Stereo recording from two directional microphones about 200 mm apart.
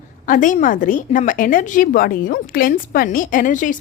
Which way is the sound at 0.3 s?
40° left (ahead or behind).